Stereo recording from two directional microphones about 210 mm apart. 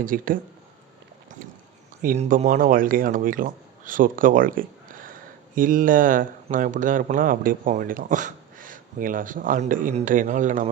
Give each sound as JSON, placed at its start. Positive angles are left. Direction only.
{"t": 0.0, "sound": "speech", "side_deg": -40}
{"t": 2.0, "sound": "speech", "side_deg": -35}